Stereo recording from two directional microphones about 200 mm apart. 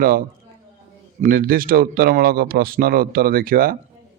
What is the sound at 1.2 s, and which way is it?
Speech, 45° right (ahead or behind).